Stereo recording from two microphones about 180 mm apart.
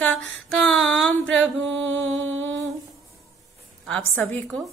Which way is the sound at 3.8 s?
5° left (ahead or behind).